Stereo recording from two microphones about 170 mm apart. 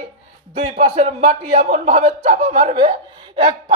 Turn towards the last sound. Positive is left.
turn(degrees=-30)  # may be behind; listen again after turning